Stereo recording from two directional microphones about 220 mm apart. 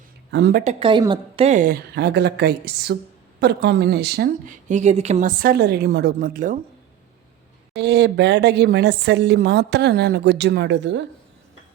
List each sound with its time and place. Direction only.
0.3 s speech: 50° right (ahead or behind)
0.6 s a woman's voice: 25° right (ahead or behind)
1.5 s a woman's voice: 35° right (ahead or behind)
7.7 s a woman's voice: 50° right (ahead or behind)